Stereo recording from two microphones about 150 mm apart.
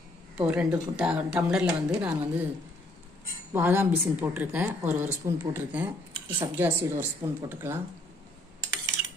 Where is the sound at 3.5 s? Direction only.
15° right (ahead or behind).